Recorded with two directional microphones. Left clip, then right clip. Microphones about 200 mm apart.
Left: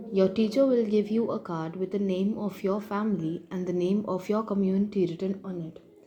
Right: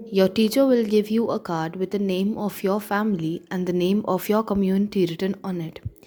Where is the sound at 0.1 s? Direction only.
35° right (ahead or behind).